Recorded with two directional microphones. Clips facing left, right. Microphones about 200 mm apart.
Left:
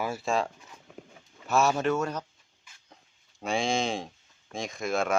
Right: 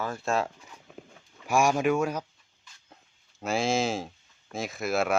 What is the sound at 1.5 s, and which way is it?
Speech, 10° right (ahead or behind).